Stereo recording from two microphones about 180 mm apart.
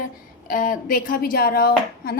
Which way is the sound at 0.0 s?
50° left (ahead or behind).